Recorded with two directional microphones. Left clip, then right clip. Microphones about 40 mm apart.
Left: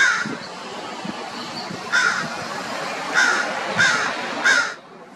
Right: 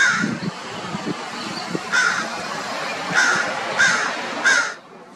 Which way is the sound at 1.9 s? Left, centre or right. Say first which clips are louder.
Even; centre.